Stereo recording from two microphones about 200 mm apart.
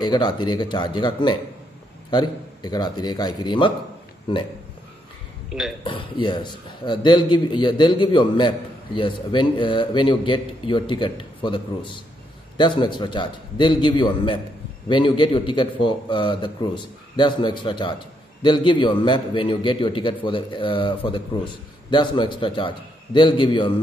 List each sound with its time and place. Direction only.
0.0 s a man's voice: 20° left (ahead or behind)
5.9 s a man's voice: 25° left (ahead or behind)